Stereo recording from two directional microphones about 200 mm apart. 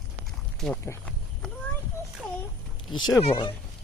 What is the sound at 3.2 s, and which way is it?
Speech, 25° left (ahead or behind).